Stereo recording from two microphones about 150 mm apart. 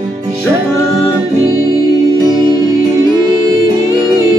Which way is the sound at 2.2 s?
25° right (ahead or behind).